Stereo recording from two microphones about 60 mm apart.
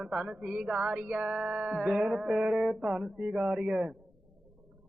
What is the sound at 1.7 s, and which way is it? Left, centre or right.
A man's voice, centre.